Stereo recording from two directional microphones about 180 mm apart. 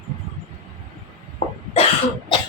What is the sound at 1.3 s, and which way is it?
Cough, 35° left (ahead or behind).